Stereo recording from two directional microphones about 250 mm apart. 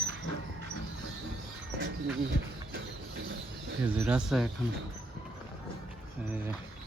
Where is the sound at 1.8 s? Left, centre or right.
Right.